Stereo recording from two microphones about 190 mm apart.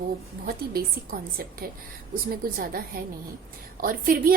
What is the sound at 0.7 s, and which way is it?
A woman's voice, 50° right (ahead or behind).